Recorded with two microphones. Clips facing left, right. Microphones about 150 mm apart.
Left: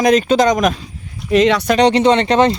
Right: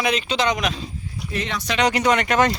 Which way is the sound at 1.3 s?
90° left.